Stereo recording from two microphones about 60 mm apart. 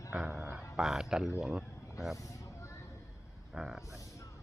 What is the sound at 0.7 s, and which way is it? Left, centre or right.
Speech, centre.